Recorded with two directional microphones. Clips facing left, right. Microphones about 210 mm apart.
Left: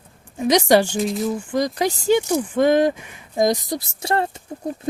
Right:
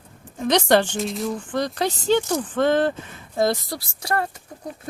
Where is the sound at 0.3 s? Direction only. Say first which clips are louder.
Left 2 dB; 10° left (ahead or behind).